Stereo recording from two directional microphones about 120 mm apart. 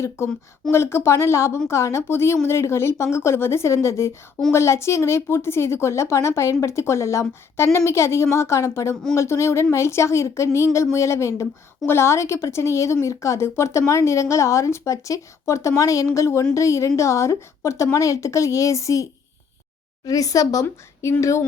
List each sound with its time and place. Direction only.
0.2 s speech: 25° left (ahead or behind)
20.1 s speech: 30° left (ahead or behind)